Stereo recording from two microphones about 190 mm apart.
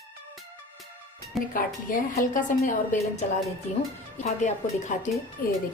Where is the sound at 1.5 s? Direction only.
45° left (ahead or behind).